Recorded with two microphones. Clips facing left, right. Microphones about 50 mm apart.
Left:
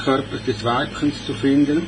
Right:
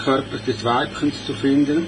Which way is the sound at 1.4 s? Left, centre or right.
Left.